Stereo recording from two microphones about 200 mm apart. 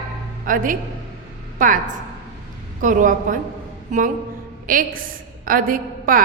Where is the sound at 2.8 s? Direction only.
40° right (ahead or behind).